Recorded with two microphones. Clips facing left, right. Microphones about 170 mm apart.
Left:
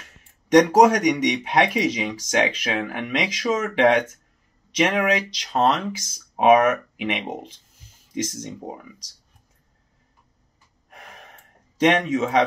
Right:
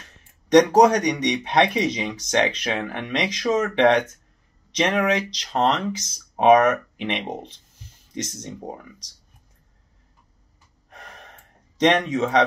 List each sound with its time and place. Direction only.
0.0 s speech: 10° left (ahead or behind)
10.9 s gasp: 10° left (ahead or behind)
11.8 s speech: 5° left (ahead or behind)